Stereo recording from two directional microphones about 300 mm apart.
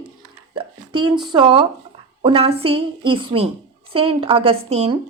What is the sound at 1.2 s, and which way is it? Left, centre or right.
A woman's voice, centre.